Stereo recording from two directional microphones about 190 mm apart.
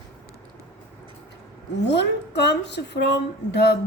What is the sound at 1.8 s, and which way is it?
A woman's voice, 65° left (ahead or behind).